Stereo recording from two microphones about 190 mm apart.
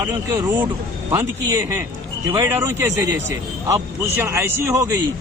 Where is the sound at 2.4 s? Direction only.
15° right (ahead or behind).